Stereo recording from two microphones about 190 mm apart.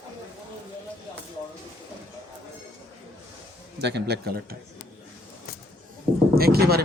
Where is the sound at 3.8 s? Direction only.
60° right (ahead or behind).